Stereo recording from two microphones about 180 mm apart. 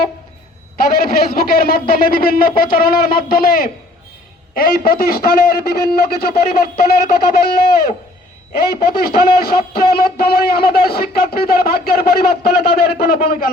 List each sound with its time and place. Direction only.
0.8 s a man's voice: 55° left (ahead or behind)